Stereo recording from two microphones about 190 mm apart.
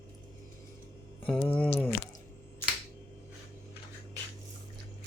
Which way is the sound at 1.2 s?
5° left (ahead or behind).